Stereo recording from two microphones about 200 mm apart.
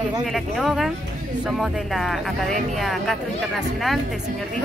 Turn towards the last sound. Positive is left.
turn(degrees=0)  # may be behind; listen again after turning